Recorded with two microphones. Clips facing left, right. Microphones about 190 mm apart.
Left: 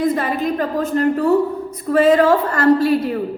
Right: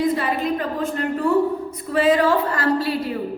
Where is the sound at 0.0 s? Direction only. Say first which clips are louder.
Left 2 dB; 45° left (ahead or behind).